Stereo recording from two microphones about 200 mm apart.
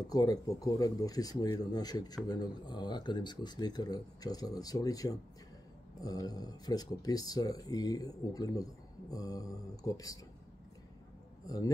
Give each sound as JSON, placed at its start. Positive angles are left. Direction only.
{"t": 0.0, "sound": "speech", "side_deg": 20}
{"t": 9.1, "sound": "mantra", "side_deg": 20}
{"t": 11.4, "sound": "mantra", "side_deg": 15}